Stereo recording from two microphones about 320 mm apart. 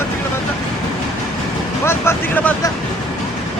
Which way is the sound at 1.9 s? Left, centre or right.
Centre.